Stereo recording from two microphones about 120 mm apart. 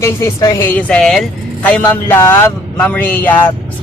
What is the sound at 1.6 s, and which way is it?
Speech, 15° left (ahead or behind).